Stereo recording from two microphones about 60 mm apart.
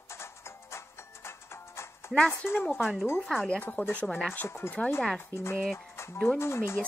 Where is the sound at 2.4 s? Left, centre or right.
Left.